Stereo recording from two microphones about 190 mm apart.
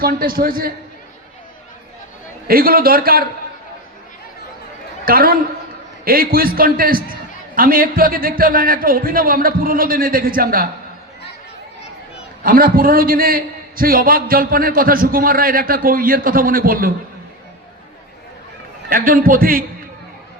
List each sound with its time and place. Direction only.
0.0 s a man's voice: 50° right (ahead or behind)
2.5 s a man's voice: 50° right (ahead or behind)
5.0 s a man's voice: 50° right (ahead or behind)
12.4 s a man's voice: 50° right (ahead or behind)
18.9 s a man's voice: 50° right (ahead or behind)